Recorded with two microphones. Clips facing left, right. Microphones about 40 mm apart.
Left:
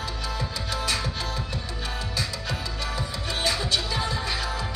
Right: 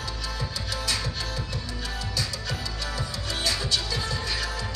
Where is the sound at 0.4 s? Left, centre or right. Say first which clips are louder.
Left 3 dB; left.